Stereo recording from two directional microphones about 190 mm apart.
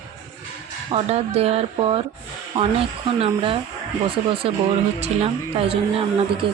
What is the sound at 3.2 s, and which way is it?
Speech, 30° right (ahead or behind).